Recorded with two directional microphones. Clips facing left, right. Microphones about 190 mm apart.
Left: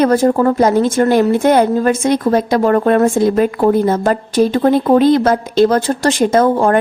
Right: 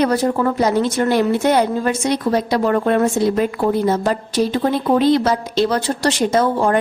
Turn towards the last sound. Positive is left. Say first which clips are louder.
# left 4 dB
turn(degrees=55)  # may be behind; listen again after turning